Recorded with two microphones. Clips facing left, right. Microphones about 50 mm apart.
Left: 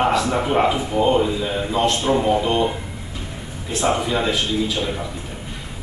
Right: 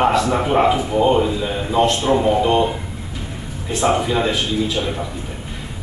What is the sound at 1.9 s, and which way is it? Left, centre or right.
Speech, centre.